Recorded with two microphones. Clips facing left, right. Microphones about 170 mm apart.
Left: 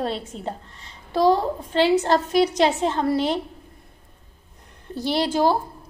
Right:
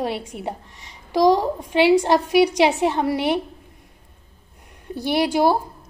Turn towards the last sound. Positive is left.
turn(degrees=-10)  # may be behind; listen again after turning